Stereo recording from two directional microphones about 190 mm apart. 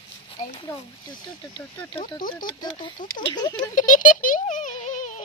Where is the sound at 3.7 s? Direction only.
45° left (ahead or behind).